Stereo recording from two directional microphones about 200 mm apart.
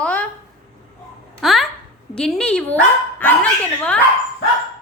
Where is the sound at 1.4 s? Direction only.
Centre (ahead or behind).